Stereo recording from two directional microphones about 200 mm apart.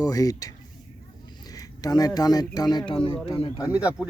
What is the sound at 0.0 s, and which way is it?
Speech, 15° left (ahead or behind).